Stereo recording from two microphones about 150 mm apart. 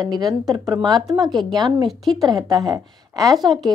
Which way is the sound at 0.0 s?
25° right (ahead or behind).